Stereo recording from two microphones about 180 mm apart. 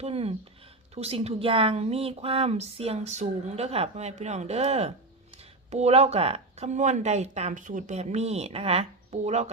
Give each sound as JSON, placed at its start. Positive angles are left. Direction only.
{"t": 0.0, "sound": "a woman's voice", "side_deg": -35}